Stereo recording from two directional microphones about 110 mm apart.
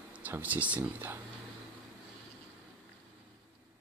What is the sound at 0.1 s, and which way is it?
Speech, 15° right (ahead or behind).